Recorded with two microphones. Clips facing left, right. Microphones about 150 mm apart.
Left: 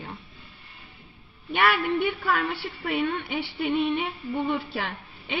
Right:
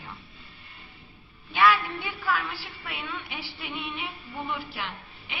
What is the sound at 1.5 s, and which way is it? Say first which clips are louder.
A woman's voice: even; 70° left (ahead or behind).